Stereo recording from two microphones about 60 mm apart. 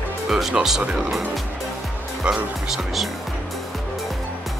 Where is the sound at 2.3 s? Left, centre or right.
Centre.